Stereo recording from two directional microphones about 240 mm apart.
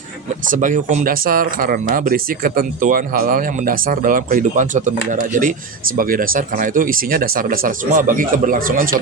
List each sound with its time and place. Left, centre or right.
0.5 s speech: right